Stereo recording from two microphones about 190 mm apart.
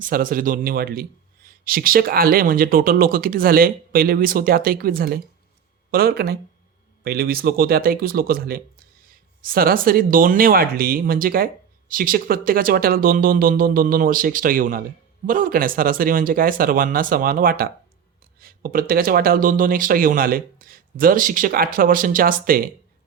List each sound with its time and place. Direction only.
0.0 s speech: 50° right (ahead or behind)